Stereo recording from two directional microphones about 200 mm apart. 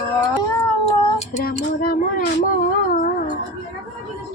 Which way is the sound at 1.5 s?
45° left (ahead or behind).